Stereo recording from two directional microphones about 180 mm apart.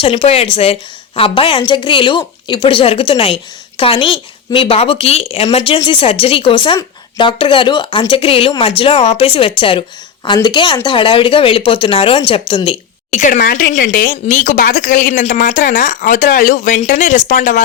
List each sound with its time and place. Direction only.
0.0 s a woman's voice: 35° left (ahead or behind)
13.1 s speech: 45° left (ahead or behind); by 13.8 s 60° left (ahead or behind)
13.8 s speech: 50° left (ahead or behind)